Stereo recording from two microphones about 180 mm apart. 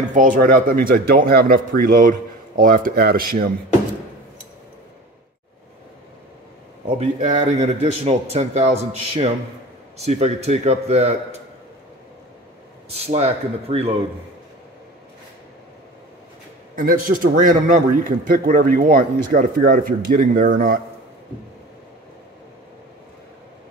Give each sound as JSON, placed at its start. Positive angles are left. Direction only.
{"t": 0.1, "sound": "a man's voice", "side_deg": -45}
{"t": 6.9, "sound": "a man's voice", "side_deg": -35}
{"t": 9.9, "sound": "a man's voice", "side_deg": -35}
{"t": 12.9, "sound": "a man's voice", "side_deg": -35}
{"t": 16.7, "sound": "a man's voice", "side_deg": -50}